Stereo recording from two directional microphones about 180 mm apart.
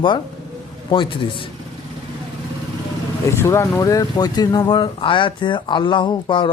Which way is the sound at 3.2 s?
15° left (ahead or behind).